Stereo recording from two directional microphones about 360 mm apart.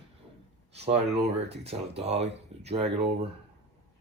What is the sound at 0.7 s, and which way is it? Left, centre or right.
Speech, centre.